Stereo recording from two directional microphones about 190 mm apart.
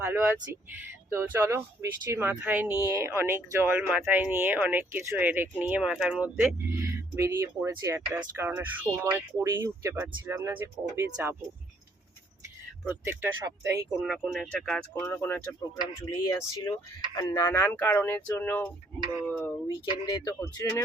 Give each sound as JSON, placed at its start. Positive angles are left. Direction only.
{"t": 0.0, "sound": "speech", "side_deg": -10}
{"t": 13.1, "sound": "speech", "side_deg": -10}
{"t": 14.0, "sound": "speech", "side_deg": 0}